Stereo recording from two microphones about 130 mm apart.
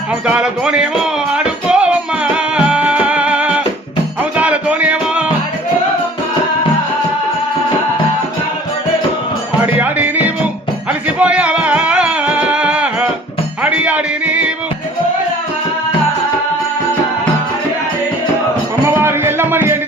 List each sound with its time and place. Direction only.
0.3 s a man's voice: 5° right (ahead or behind)
1.3 s music: 5° right (ahead or behind)
9.7 s music: 10° right (ahead or behind)
18.9 s music: 20° right (ahead or behind)